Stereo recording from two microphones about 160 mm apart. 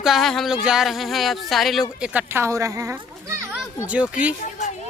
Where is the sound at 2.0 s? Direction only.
10° right (ahead or behind).